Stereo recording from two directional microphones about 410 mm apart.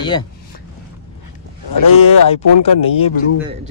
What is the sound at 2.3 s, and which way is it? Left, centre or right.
Speech, centre.